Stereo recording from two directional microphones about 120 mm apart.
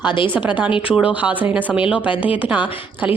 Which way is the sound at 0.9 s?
10° right (ahead or behind).